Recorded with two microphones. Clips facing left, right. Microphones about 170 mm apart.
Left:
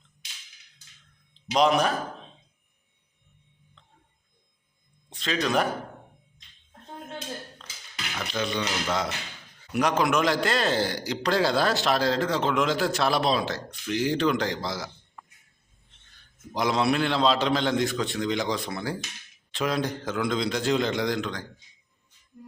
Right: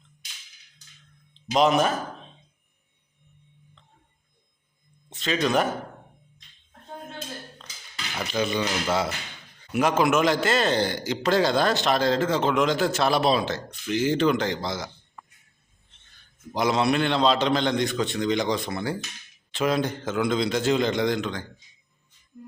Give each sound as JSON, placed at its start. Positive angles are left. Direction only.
{"t": 1.3, "sound": "speech", "side_deg": 0}
{"t": 5.0, "sound": "speech", "side_deg": 0}
{"t": 8.3, "sound": "a man's voice", "side_deg": -5}
{"t": 16.6, "sound": "a man's voice", "side_deg": 0}